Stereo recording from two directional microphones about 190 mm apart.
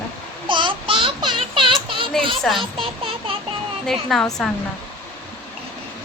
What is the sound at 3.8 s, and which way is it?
Speech, centre (ahead or behind).